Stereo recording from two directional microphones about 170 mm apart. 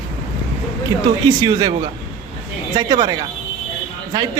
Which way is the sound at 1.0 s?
25° right (ahead or behind).